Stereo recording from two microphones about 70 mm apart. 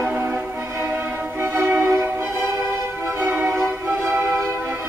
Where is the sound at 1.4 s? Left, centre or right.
Right.